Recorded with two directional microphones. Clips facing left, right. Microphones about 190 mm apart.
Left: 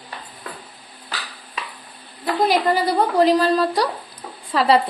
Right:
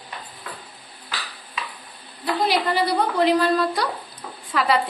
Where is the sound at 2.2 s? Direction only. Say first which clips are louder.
Left 3 dB; 45° left (ahead or behind).